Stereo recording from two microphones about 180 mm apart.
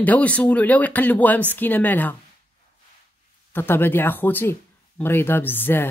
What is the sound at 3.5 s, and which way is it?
Speech, 10° left (ahead or behind).